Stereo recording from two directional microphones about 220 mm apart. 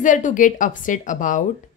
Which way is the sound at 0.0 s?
35° left (ahead or behind).